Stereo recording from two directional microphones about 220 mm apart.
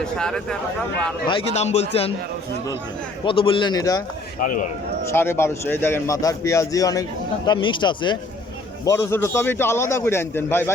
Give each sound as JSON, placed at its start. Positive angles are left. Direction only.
{"t": 0.0, "sound": "speech", "side_deg": 5}
{"t": 1.3, "sound": "a man's voice", "side_deg": 30}
{"t": 3.2, "sound": "a man's voice", "side_deg": 25}
{"t": 4.4, "sound": "speech", "side_deg": 35}
{"t": 5.1, "sound": "a man's voice", "side_deg": 10}